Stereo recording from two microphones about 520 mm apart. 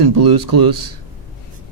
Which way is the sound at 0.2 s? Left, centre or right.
Right.